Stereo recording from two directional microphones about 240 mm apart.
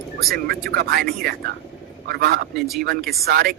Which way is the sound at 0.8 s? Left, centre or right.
Right.